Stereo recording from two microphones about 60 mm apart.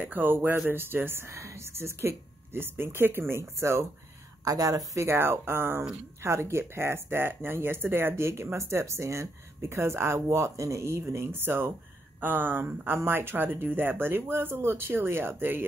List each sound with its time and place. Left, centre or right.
0.0 s speech: right
4.5 s speech: right
4.9 s speech: right